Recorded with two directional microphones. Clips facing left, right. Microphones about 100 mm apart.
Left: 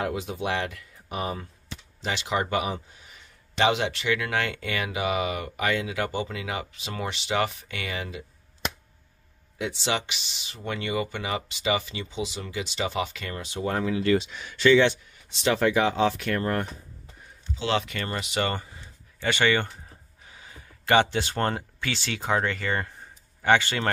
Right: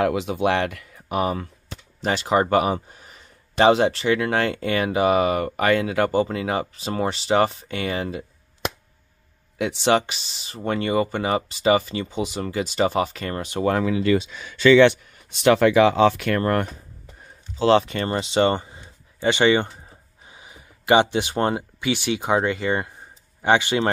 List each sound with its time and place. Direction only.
0.0 s speech: 75° right (ahead or behind)
1.7 s speech: 45° right (ahead or behind)
9.6 s speech: 60° right (ahead or behind)
15.4 s speech: 80° right; by 16.6 s 65° right (ahead or behind)
17.6 s speech: 35° right (ahead or behind); by 23.9 s 20° right (ahead or behind)